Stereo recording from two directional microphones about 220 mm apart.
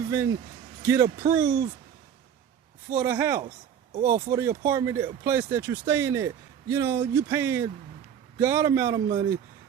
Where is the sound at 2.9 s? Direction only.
10° right (ahead or behind).